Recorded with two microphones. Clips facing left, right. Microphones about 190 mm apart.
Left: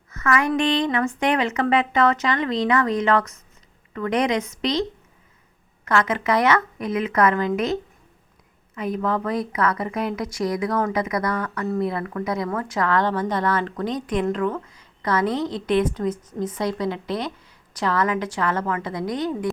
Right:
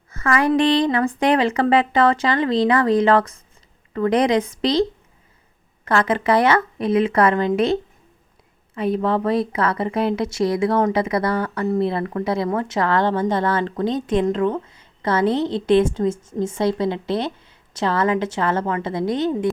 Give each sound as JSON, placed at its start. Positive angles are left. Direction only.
{"t": 0.1, "sound": "a woman's voice", "side_deg": -30}